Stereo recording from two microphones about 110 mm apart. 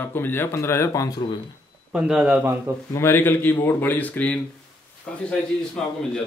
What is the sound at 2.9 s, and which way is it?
Speech, 20° left (ahead or behind).